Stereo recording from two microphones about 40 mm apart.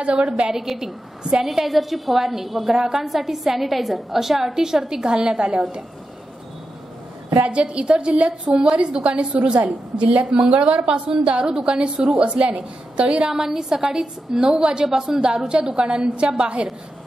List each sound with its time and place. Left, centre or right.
0.0 s a woman's voice: right
0.5 s a woman's voice: centre
7.4 s a woman's voice: right
13.2 s a woman's voice: centre